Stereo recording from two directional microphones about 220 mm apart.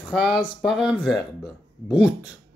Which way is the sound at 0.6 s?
Centre (ahead or behind).